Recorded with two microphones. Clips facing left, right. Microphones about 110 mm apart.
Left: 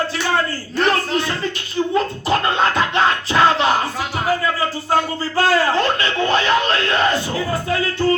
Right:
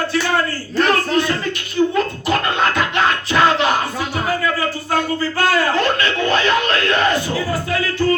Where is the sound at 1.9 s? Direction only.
30° left (ahead or behind).